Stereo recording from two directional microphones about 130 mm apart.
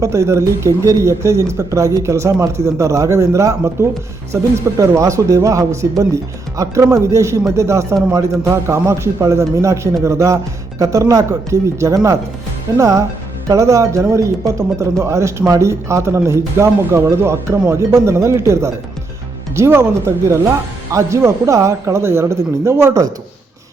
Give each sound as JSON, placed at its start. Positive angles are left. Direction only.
{"t": 0.0, "sound": "speech", "side_deg": -25}